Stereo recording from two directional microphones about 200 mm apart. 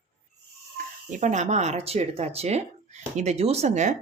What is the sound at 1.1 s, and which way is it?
Speech, 40° right (ahead or behind).